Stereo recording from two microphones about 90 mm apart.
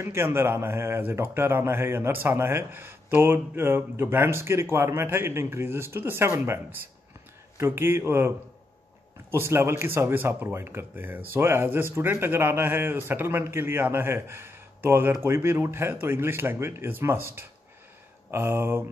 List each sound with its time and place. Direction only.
0.0 s speech: 30° right (ahead or behind)
9.3 s speech: 30° right (ahead or behind)